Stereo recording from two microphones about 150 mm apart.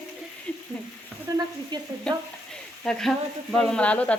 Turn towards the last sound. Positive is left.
turn(degrees=10)  # may be behind; listen again after turning